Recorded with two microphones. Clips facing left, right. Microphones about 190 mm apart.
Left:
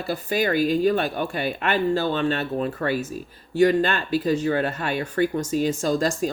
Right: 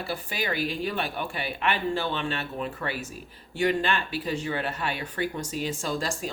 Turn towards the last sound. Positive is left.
turn(degrees=45)  # may be behind; listen again after turning